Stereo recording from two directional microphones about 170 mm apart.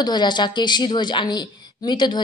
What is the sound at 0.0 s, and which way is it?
A woman's voice, 25° left (ahead or behind).